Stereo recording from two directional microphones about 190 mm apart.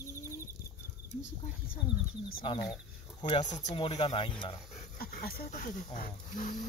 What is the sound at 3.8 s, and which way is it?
Speech, 30° left (ahead or behind).